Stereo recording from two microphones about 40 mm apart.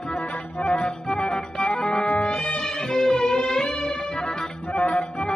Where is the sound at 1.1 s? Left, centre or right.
Left.